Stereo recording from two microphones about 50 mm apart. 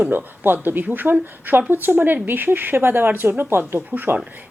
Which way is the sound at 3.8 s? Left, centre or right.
Right.